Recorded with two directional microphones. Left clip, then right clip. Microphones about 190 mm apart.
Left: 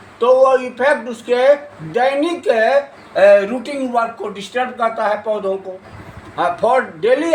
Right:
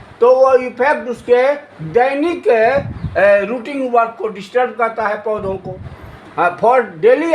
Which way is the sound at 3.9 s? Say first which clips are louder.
Right 5 dB; 35° right (ahead or behind).